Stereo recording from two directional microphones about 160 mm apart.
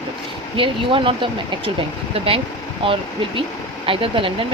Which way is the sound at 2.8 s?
35° right (ahead or behind).